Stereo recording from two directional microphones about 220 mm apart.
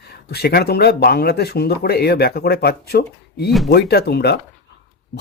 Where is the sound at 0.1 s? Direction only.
45° left (ahead or behind).